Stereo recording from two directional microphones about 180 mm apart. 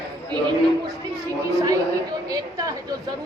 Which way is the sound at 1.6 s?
20° right (ahead or behind).